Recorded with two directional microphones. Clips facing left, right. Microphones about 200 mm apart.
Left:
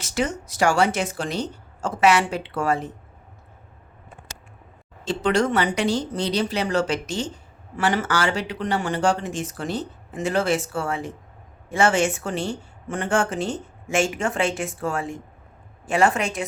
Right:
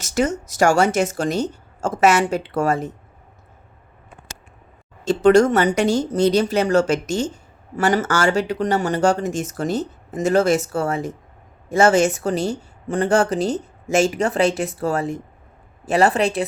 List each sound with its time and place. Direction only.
0.0 s speech: 45° right (ahead or behind)
5.0 s a woman's voice: 45° right (ahead or behind)